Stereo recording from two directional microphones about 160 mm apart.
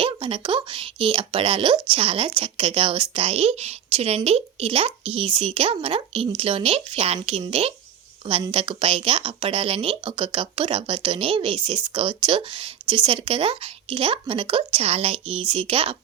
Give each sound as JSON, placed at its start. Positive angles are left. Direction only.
{"t": 0.0, "sound": "speech", "side_deg": -35}